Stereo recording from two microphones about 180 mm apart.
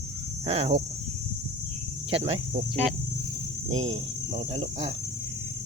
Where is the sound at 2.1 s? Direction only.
35° right (ahead or behind).